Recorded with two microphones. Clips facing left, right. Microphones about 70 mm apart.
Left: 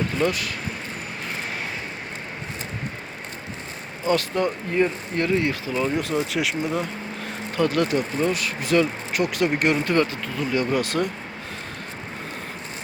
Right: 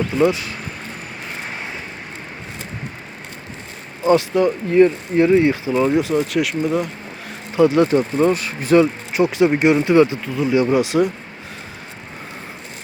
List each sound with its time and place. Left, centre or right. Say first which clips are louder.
0.2 s speech: right 8 dB; right
4.0 s speech: right 7 dB; right
4.4 s speech: right 8 dB; centre
5.2 s speech: right 8 dB; centre
6.0 s speech: right 6 dB; centre
7.5 s speech: right 8 dB; centre
7.9 s speech: right 7 dB; right; by 11.1 s centre